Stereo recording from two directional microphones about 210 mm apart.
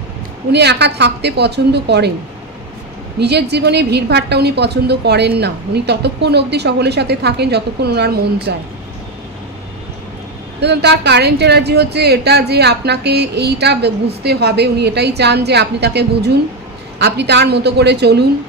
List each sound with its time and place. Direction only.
0.5 s a woman's voice: 50° right (ahead or behind)
3.2 s a woman's voice: 50° right (ahead or behind)
10.6 s a woman's voice: 50° right (ahead or behind)